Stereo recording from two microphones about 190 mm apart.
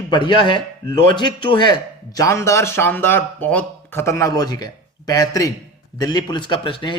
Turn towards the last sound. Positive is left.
turn(degrees=25)  # may be behind; listen again after turning